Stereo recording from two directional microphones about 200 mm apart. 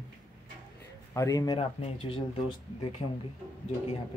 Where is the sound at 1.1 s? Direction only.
15° left (ahead or behind).